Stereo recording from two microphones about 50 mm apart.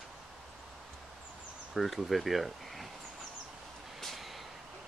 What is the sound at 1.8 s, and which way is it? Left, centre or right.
Speech, centre.